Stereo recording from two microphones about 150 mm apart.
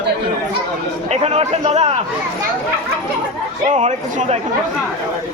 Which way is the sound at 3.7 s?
50° right (ahead or behind).